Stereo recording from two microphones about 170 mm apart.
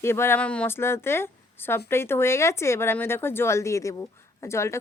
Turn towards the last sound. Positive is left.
turn(degrees=15)  # may be behind; listen again after turning